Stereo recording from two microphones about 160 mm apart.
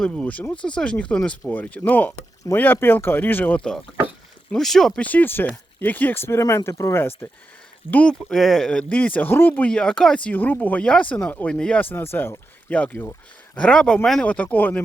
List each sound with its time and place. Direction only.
0.0 s speech: 5° left (ahead or behind)